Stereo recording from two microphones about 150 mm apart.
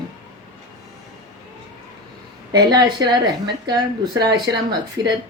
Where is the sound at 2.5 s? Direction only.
30° right (ahead or behind).